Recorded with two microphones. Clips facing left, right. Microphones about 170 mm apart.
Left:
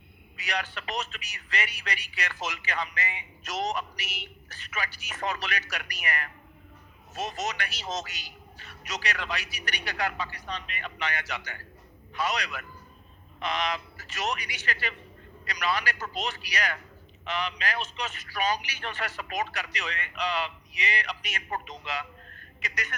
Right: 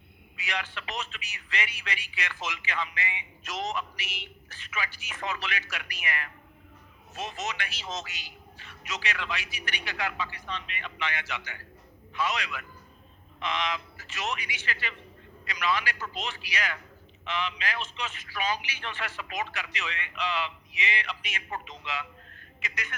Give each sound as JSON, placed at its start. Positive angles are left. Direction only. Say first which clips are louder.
{"t": 0.4, "sound": "speech", "louder": "left 2 dB", "side_deg": 40}
{"t": 4.5, "sound": "a man's voice", "louder": "left 1 dB", "side_deg": 40}